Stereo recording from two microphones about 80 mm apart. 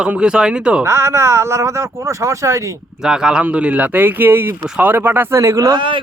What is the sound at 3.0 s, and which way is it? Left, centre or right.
Speech, centre.